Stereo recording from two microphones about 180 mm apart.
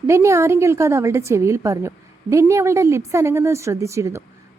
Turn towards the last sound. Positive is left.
turn(degrees=-15)  # may be behind; listen again after turning